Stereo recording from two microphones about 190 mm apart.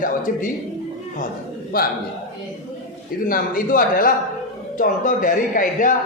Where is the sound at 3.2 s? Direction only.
45° left (ahead or behind).